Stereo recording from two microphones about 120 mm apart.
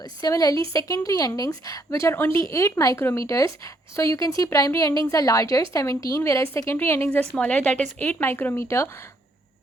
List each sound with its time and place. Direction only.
0.0 s a woman's voice: 30° left (ahead or behind)
7.3 s a woman's voice: 10° left (ahead or behind)